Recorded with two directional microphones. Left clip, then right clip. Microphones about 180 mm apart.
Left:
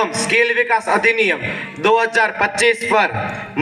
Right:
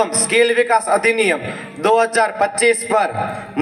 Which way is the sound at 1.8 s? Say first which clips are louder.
Even; 45° right (ahead or behind).